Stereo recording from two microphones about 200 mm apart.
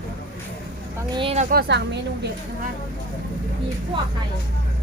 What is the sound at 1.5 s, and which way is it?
Speech, 55° right (ahead or behind).